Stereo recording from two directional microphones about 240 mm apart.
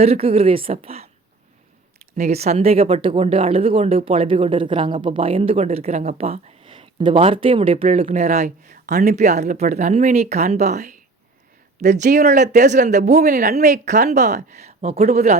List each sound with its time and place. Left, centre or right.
0.0 s speech: right
2.1 s speech: right